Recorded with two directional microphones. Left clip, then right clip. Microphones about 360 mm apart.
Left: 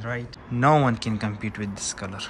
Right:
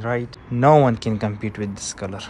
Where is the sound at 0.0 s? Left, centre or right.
Centre.